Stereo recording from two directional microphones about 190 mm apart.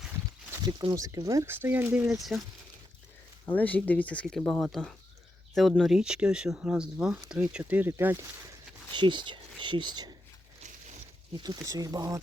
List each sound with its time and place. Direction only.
0.5 s speech: 20° right (ahead or behind); by 2.4 s centre (ahead or behind)
3.5 s speech: 10° left (ahead or behind); by 8.2 s 15° right (ahead or behind)
8.9 s speech: 25° right (ahead or behind)
11.4 s speech: 20° right (ahead or behind)